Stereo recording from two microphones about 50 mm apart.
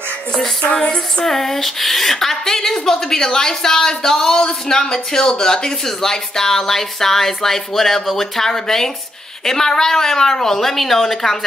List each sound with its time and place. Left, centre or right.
0.3 s music: centre
0.7 s female singing: centre